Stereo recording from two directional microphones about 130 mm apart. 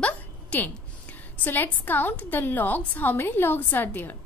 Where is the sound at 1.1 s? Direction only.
15° left (ahead or behind).